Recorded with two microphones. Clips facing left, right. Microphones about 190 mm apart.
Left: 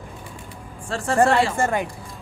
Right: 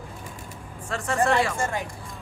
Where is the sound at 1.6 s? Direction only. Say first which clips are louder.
Left 6 dB; 60° left (ahead or behind).